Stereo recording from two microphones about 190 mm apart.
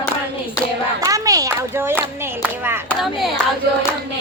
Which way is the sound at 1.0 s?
20° right (ahead or behind).